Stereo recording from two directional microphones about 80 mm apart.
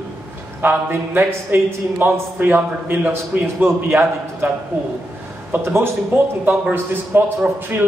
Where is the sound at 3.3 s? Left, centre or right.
Right.